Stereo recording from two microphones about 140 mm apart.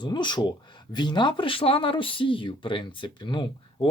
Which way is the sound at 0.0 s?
30° left (ahead or behind).